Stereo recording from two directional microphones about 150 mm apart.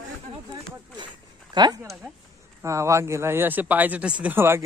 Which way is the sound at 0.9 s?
30° right (ahead or behind).